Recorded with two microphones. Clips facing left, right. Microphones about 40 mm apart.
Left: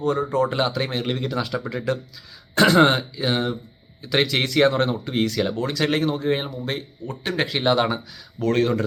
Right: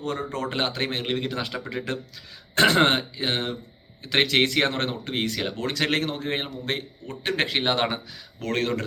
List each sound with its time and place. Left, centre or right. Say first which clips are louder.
0.0 s speech: left 8 dB; right